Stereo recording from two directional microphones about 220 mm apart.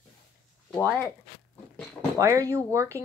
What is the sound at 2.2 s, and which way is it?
Child singing, 15° right (ahead or behind).